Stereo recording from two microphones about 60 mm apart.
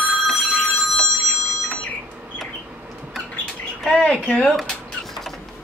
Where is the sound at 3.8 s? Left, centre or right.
Centre.